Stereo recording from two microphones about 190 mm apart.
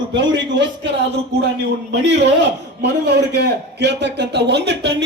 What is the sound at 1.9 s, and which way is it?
A man's voice, 65° right (ahead or behind).